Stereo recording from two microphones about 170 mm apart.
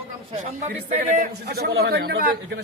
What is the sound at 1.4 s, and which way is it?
A man's voice, 70° right (ahead or behind).